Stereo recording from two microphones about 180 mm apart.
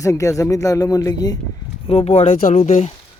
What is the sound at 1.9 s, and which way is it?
Speech, 35° left (ahead or behind).